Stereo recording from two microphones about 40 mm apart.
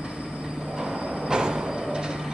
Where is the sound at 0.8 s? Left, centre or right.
Right.